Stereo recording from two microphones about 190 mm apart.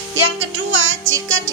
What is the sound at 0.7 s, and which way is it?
Speech, 90° right.